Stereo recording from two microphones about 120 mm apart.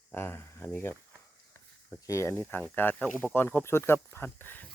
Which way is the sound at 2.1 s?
25° left (ahead or behind).